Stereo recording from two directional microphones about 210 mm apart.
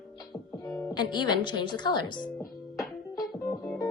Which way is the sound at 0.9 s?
20° left (ahead or behind).